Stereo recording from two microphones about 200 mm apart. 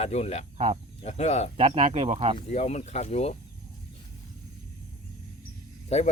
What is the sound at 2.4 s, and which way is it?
Speech, 35° left (ahead or behind).